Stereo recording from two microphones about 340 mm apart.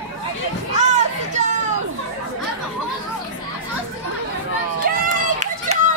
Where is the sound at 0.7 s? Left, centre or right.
Right.